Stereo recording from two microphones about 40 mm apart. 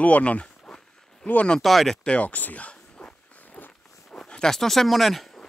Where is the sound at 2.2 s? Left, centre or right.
Left.